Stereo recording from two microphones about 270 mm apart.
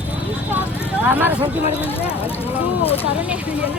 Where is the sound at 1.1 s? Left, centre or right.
Centre.